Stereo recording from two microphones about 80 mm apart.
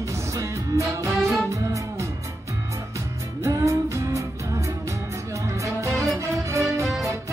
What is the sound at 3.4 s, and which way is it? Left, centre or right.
Music, right.